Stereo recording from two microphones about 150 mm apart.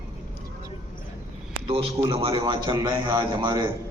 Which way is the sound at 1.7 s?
40° right (ahead or behind).